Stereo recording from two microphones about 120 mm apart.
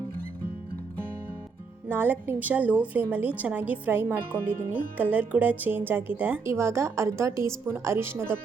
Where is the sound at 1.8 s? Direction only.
15° right (ahead or behind).